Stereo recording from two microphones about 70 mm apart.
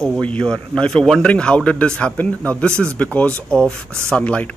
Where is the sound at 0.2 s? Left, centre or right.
Centre.